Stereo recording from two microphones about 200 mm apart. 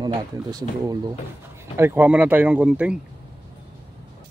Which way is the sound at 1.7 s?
10° right (ahead or behind).